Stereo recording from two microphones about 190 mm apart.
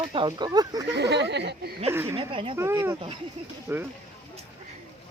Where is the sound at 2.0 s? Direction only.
30° right (ahead or behind).